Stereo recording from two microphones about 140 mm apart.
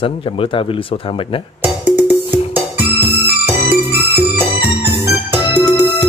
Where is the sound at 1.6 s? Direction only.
10° right (ahead or behind).